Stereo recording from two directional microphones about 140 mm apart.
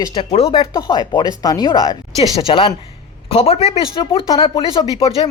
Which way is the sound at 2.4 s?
40° left (ahead or behind).